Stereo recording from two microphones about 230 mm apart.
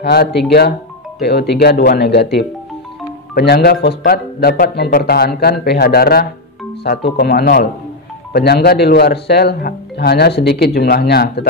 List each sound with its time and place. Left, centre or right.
0.0 s speech: left